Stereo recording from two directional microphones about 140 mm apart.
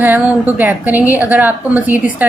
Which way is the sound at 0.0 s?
10° right (ahead or behind).